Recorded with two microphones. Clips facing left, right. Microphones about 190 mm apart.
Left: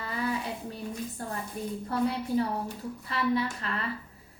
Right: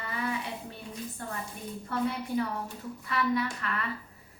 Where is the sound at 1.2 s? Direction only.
35° left (ahead or behind).